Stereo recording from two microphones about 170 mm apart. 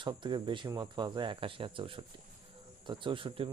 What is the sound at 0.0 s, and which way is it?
Speech, 30° right (ahead or behind).